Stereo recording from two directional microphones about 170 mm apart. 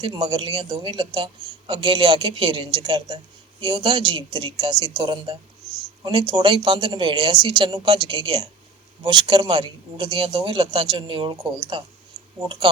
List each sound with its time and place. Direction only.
0.0 s a man's voice: 30° right (ahead or behind)